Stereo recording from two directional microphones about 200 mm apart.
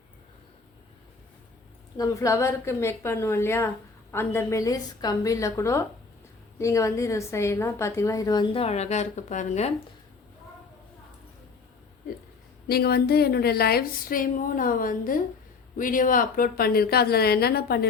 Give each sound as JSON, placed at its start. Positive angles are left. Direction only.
{"t": 2.0, "sound": "a woman's voice", "side_deg": 15}
{"t": 12.6, "sound": "speech", "side_deg": 50}